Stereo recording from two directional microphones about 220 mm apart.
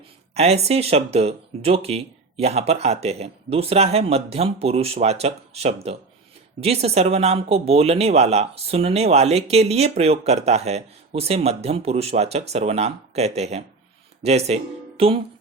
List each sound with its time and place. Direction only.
0.3 s speech: 30° right (ahead or behind)